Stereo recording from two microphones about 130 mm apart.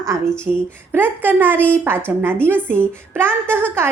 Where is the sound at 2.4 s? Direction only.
20° right (ahead or behind).